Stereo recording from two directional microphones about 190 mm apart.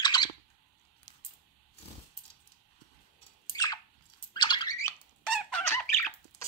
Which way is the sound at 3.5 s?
20° left (ahead or behind).